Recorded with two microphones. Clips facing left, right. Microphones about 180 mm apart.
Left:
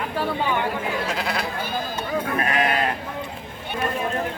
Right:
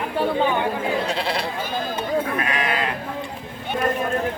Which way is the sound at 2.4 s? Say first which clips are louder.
Left 2 dB; 40° left (ahead or behind).